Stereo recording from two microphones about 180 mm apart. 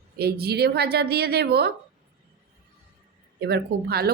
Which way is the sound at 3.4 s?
60° right (ahead or behind).